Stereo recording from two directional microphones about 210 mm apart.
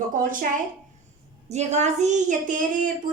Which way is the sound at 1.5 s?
30° right (ahead or behind).